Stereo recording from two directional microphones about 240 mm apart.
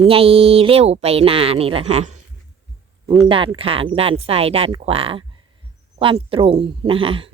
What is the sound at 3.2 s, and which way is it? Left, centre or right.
Speech, right.